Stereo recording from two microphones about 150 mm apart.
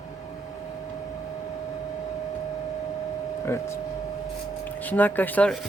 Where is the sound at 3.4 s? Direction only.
20° left (ahead or behind).